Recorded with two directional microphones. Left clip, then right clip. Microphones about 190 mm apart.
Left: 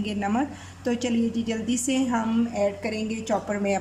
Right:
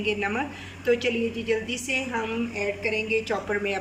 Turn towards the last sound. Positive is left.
turn(degrees=30)  # may be behind; listen again after turning